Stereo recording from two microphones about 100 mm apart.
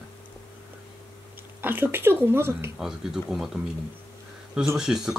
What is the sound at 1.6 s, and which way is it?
Speech, 20° right (ahead or behind).